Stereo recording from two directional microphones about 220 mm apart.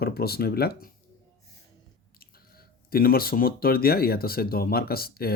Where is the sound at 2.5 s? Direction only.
40° left (ahead or behind).